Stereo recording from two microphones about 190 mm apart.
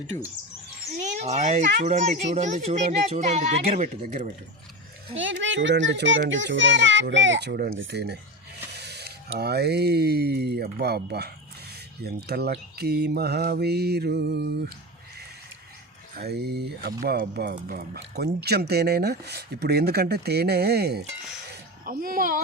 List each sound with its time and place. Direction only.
1.0 s speech: 35° right (ahead or behind)
5.1 s a child's voice: 80° right; by 14.7 s 60° right (ahead or behind)
16.1 s speech: 60° right (ahead or behind)
21.5 s a sound: 50° right (ahead or behind)